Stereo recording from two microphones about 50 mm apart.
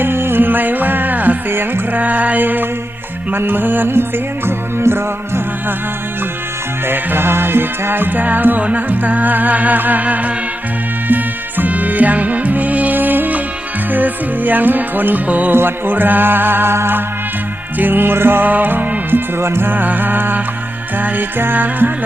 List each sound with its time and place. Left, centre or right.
0.0 s music: right
2.0 s a sound: right
3.3 s music: right
6.8 s music: right
17.7 s music: right
19.4 s music: right
19.7 s music: right